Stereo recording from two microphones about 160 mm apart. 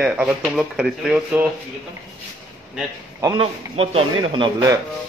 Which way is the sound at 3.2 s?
30° right (ahead or behind).